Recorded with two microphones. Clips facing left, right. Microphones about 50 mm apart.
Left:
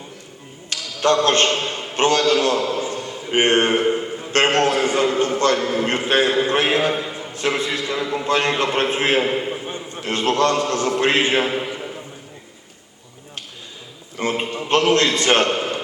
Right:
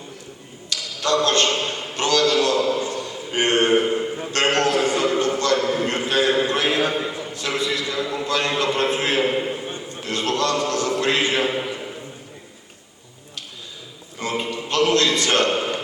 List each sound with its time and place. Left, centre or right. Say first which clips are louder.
0.7 s a man's voice: left 3 dB; left
2.6 s a sound: right 1 dB; left
4.3 s a man's voice: left 3 dB; left
9.3 s a man's voice: even; centre
9.6 s a man's voice: left 2 dB; left
11.6 s a sound: left 1 dB; centre
14.2 s a man's voice: left 3 dB; left